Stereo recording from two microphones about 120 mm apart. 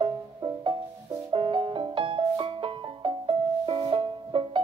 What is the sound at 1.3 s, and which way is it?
Music, 45° right (ahead or behind).